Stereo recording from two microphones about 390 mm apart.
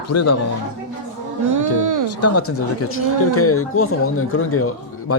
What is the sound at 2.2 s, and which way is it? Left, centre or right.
Speech, left.